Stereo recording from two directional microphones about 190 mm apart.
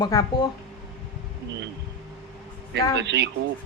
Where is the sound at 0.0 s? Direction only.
20° left (ahead or behind).